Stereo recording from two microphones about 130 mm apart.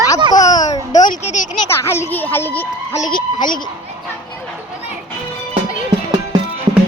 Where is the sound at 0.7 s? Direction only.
65° left (ahead or behind).